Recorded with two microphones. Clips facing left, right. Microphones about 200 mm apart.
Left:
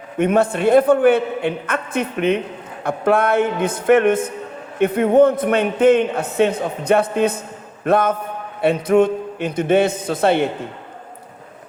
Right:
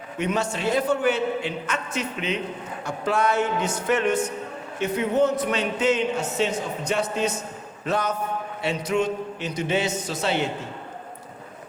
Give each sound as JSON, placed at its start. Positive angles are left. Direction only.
{"t": 0.2, "sound": "a man's voice", "side_deg": 55}